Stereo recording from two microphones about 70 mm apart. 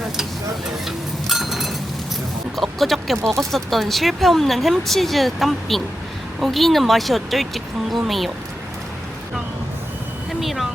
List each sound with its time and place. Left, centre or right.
0.9 s a sound: centre
2.6 s speech: centre
3.2 s speech: right
3.5 s speech: centre
10.4 s speech: centre